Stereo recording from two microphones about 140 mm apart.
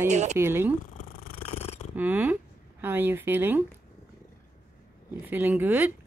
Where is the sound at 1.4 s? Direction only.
50° left (ahead or behind).